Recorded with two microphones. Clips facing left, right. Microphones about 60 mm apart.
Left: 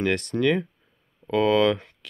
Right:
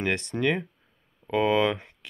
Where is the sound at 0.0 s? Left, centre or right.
Centre.